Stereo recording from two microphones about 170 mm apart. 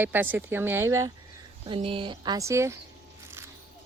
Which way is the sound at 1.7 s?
30° right (ahead or behind).